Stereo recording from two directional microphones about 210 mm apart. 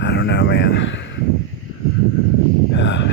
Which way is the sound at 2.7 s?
60° left (ahead or behind).